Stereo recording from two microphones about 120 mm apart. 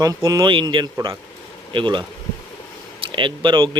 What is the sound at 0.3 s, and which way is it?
Speech, 35° right (ahead or behind).